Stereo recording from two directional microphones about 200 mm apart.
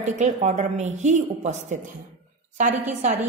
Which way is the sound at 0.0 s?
35° right (ahead or behind).